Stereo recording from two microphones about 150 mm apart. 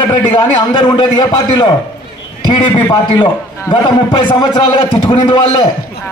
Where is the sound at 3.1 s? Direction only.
30° left (ahead or behind).